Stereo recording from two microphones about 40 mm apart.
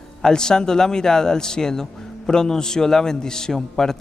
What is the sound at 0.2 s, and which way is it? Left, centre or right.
A man's voice, centre.